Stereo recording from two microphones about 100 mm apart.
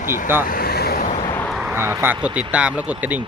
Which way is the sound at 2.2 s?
15° right (ahead or behind).